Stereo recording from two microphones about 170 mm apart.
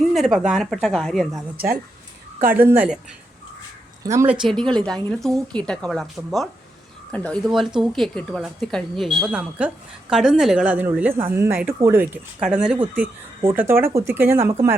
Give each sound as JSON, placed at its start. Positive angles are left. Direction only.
{"t": 0.0, "sound": "a woman's voice", "side_deg": 0}
{"t": 1.5, "sound": "speech", "side_deg": -60}
{"t": 2.4, "sound": "speech", "side_deg": -15}
{"t": 4.0, "sound": "speech", "side_deg": -15}
{"t": 4.4, "sound": "a woman's voice", "side_deg": 5}